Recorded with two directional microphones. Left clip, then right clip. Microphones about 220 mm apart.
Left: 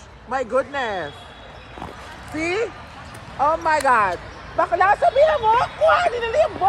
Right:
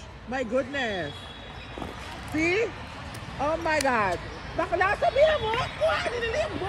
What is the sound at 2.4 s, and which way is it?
Speech, 75° left (ahead or behind).